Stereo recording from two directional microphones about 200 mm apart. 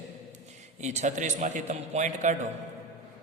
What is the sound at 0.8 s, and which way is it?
A man's voice, 35° right (ahead or behind).